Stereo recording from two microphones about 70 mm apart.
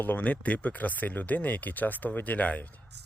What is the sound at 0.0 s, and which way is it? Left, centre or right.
Speech, left.